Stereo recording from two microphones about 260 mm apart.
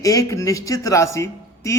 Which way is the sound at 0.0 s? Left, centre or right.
Centre.